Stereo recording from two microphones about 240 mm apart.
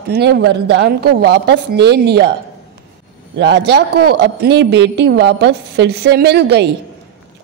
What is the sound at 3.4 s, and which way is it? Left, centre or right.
Speech, right.